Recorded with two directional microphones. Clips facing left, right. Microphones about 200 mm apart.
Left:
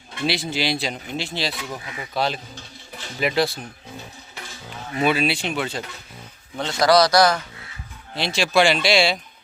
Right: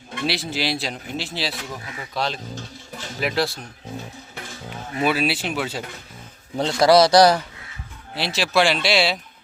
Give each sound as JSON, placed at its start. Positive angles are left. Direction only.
{"t": 0.3, "sound": "speech", "side_deg": 0}
{"t": 4.9, "sound": "speech", "side_deg": -5}
{"t": 6.6, "sound": "speech", "side_deg": -25}
{"t": 8.1, "sound": "speech", "side_deg": -5}